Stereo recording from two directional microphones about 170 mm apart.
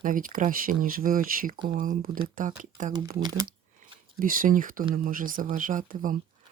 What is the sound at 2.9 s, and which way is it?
Speech, 25° right (ahead or behind).